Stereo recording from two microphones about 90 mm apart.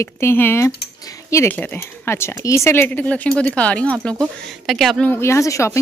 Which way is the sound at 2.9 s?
15° left (ahead or behind).